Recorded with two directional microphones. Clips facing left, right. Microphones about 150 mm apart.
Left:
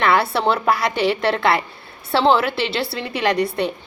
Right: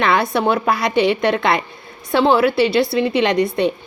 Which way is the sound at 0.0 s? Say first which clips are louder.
Right 1 dB; 20° right (ahead or behind).